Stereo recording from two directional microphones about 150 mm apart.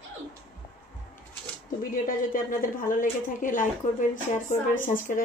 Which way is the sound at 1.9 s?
65° left (ahead or behind).